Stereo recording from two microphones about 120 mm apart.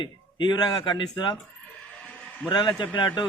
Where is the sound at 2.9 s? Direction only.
40° left (ahead or behind).